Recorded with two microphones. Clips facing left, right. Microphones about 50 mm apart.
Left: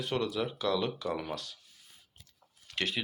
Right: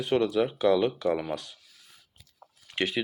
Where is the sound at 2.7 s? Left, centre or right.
Right.